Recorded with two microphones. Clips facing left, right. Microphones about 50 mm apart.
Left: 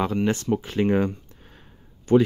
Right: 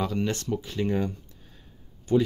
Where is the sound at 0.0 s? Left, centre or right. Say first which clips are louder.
Left 5 dB; left.